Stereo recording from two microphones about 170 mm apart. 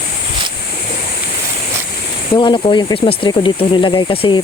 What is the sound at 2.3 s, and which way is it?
Speech, 25° left (ahead or behind).